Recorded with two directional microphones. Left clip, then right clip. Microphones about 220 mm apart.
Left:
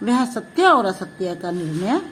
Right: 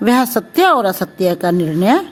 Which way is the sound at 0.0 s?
45° right (ahead or behind).